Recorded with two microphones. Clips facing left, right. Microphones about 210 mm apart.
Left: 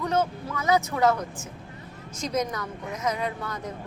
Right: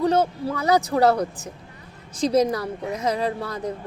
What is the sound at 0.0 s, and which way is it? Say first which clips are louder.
Speech: right 6 dB; 35° right (ahead or behind).